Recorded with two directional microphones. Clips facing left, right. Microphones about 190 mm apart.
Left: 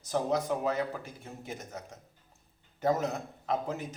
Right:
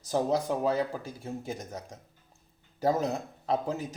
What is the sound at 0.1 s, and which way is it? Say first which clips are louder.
A man's voice: right 2 dB; 30° right (ahead or behind).